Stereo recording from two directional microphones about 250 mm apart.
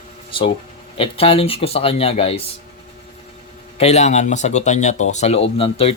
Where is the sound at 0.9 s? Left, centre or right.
Left.